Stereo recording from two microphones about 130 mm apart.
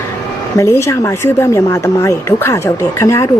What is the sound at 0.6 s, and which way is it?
A woman's voice, 20° left (ahead or behind).